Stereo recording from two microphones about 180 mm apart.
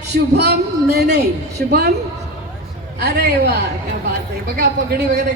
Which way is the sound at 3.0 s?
65° right (ahead or behind).